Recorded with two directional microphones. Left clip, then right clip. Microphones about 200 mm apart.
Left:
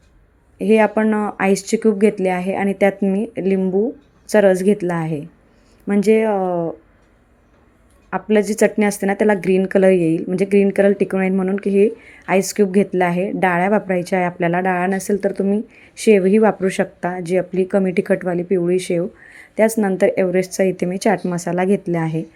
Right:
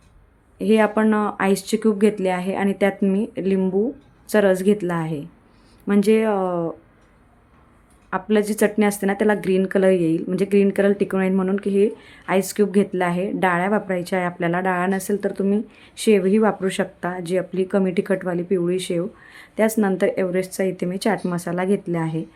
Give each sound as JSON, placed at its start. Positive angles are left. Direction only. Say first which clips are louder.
{"t": 0.6, "sound": "a woman's voice", "louder": "left 3 dB", "side_deg": 10}
{"t": 8.1, "sound": "a woman's voice", "louder": "left 3 dB", "side_deg": 10}